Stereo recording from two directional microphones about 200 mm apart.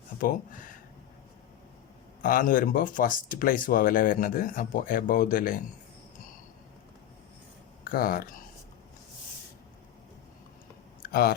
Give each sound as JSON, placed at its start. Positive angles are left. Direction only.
{"t": 0.2, "sound": "speech", "side_deg": 45}
{"t": 2.2, "sound": "speech", "side_deg": 45}
{"t": 7.9, "sound": "speech", "side_deg": 45}
{"t": 11.0, "sound": "a sound", "side_deg": 50}